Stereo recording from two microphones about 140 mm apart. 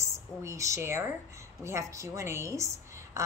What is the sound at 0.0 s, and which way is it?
A woman's voice, 20° right (ahead or behind).